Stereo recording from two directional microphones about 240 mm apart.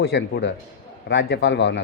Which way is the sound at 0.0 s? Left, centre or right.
Left.